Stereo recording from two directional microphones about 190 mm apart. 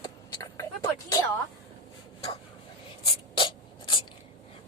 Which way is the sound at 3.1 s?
25° left (ahead or behind).